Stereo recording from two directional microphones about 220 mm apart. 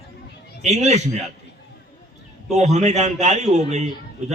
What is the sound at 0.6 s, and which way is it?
Speech, 30° right (ahead or behind).